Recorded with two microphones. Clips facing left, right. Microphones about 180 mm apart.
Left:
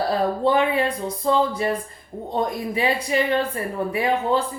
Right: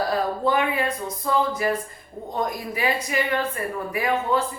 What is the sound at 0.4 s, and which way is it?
A woman's voice, 30° left (ahead or behind).